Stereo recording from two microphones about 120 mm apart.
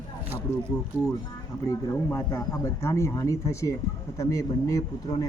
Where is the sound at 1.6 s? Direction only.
25° left (ahead or behind).